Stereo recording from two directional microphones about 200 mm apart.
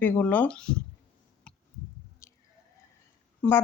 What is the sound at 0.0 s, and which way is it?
Speech, 10° left (ahead or behind).